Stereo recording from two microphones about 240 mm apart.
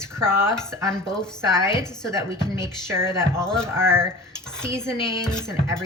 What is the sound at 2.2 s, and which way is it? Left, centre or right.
Speech, centre.